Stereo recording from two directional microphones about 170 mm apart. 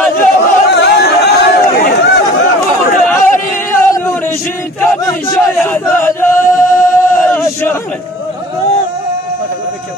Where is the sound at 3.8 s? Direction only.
15° left (ahead or behind).